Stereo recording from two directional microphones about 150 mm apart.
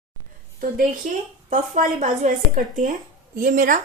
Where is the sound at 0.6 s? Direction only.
65° right (ahead or behind).